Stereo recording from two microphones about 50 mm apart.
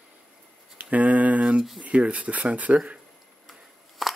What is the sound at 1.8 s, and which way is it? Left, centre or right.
Speech, right.